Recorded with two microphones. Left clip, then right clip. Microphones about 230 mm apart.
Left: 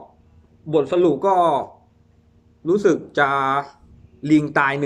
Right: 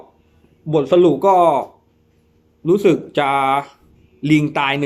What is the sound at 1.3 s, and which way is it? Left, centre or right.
Speech, right.